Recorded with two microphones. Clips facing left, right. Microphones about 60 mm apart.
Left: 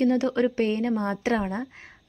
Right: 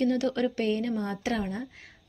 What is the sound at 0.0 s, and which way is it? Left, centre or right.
A woman's voice, left.